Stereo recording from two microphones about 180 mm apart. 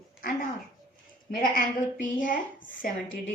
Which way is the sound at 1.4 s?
50° left (ahead or behind).